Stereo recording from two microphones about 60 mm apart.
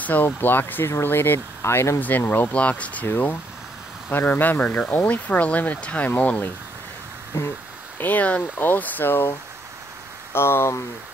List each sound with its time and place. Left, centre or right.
0.0 s speech: left
2.0 s speech: left
3.1 s speech: left
7.3 s speech: left
8.0 s speech: left
10.3 s speech: left